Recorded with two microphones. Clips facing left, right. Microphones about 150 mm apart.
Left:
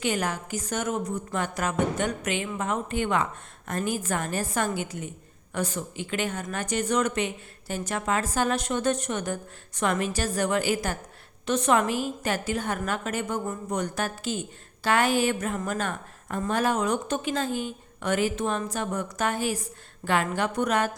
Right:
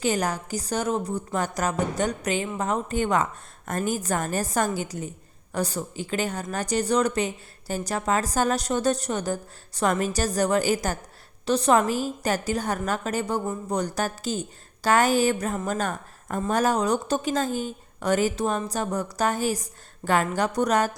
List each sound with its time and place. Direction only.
0.0 s a woman's voice: 40° right (ahead or behind)